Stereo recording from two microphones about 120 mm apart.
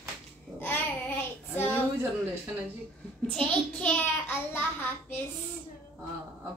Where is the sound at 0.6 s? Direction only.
15° left (ahead or behind).